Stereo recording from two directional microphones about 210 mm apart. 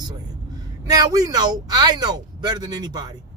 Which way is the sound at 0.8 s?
15° right (ahead or behind).